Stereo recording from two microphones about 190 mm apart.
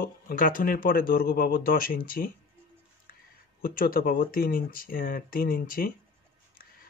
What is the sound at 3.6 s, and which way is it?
Speech, 50° left (ahead or behind).